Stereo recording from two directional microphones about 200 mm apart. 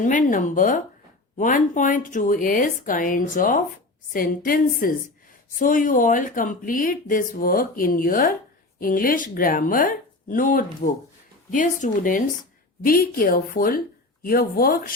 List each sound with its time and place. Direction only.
0.0 s a woman's voice: 40° left (ahead or behind)